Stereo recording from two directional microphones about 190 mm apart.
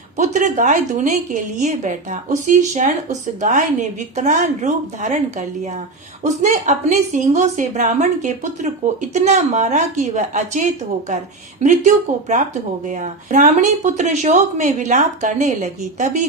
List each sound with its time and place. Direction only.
0.2 s a woman's voice: 40° right (ahead or behind)
11.6 s a woman's voice: 40° right (ahead or behind)